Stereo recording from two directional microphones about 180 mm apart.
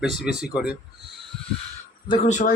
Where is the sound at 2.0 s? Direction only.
30° left (ahead or behind).